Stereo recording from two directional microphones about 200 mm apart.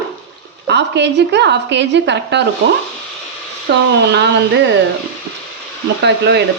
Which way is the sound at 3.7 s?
55° right (ahead or behind).